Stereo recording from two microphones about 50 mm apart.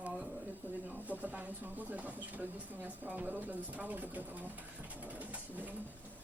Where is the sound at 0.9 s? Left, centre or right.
Right.